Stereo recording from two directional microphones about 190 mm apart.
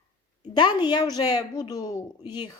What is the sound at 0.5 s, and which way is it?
A woman's voice, 20° left (ahead or behind).